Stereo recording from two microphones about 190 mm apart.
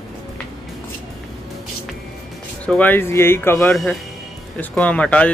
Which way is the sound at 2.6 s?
10° left (ahead or behind).